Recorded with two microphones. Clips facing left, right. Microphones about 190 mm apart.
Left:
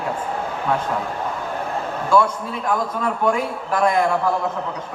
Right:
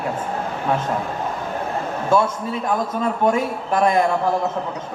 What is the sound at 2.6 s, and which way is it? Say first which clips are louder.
A man's voice: even; 25° right (ahead or behind).